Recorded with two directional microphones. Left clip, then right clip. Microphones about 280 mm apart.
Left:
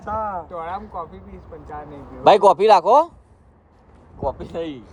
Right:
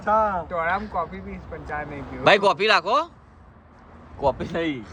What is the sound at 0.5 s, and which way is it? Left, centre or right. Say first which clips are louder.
Speech: right 5 dB; centre.